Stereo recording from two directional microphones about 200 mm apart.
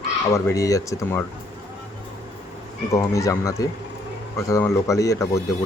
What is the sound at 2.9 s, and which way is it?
A man's voice, 15° left (ahead or behind).